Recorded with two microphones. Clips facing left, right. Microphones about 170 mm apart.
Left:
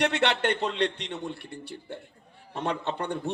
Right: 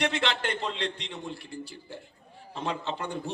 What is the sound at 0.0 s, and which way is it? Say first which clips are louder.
A man's voice: left 4 dB; 65° left (ahead or behind).